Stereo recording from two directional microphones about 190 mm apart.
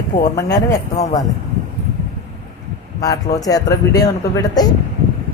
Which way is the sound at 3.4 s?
20° left (ahead or behind).